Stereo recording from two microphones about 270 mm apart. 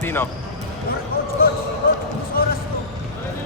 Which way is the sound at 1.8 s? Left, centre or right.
Left.